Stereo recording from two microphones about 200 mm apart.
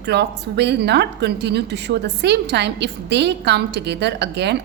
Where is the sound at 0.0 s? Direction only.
55° right (ahead or behind).